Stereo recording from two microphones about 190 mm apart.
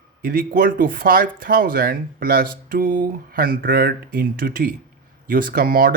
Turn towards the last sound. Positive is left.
turn(degrees=-50)  # may be behind; listen again after turning